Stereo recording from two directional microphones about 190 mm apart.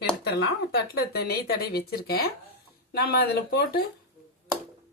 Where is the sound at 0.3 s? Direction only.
65° left (ahead or behind).